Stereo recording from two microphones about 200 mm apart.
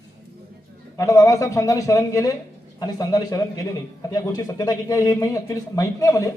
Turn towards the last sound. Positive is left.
turn(degrees=15)  # may be behind; listen again after turning